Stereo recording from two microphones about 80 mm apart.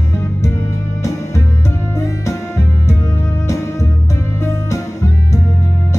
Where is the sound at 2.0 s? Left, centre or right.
Left.